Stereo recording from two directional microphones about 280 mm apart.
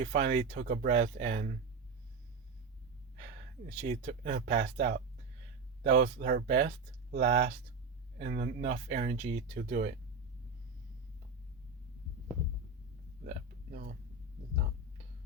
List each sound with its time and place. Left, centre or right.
0.0 s speech: right
3.8 s speech: right
6.0 s speech: right
13.2 s a sound: right